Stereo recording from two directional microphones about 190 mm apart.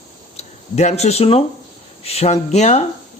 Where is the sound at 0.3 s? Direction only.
35° left (ahead or behind).